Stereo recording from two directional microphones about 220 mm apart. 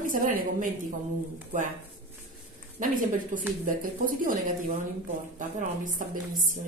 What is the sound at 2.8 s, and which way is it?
A woman's voice, 40° right (ahead or behind).